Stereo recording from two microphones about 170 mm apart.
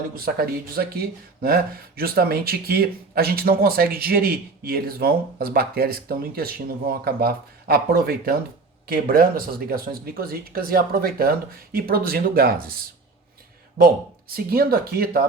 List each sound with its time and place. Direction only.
0.2 s speech: 60° right (ahead or behind)
13.7 s speech: 60° right (ahead or behind)